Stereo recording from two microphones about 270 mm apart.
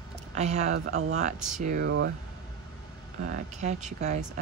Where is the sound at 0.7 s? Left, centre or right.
Right.